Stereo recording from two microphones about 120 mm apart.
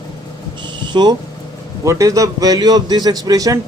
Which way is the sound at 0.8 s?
40° right (ahead or behind).